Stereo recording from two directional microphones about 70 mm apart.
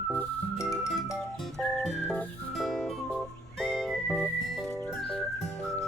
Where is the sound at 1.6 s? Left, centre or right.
Centre.